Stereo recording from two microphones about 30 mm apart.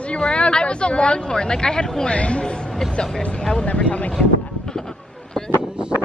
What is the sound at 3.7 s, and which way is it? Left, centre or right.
Speech, left.